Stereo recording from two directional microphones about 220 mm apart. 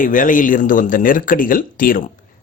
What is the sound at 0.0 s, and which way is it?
Speech, 35° left (ahead or behind).